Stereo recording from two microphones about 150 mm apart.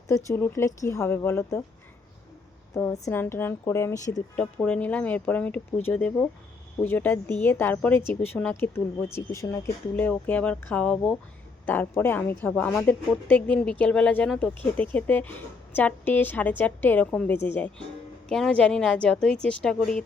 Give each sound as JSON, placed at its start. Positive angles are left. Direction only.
{"t": 0.1, "sound": "speech", "side_deg": 20}
{"t": 2.7, "sound": "a woman's voice", "side_deg": 20}
{"t": 4.4, "sound": "a woman's voice", "side_deg": 5}